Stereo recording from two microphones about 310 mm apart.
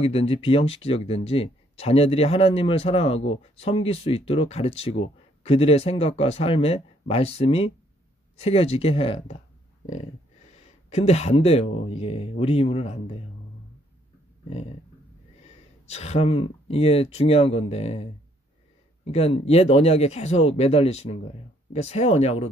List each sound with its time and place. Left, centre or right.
0.0 s speech: centre
10.5 s speech: left
15.9 s speech: left
19.0 s speech: centre